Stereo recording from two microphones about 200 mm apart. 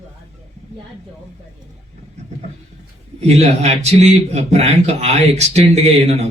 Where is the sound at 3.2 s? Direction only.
30° right (ahead or behind).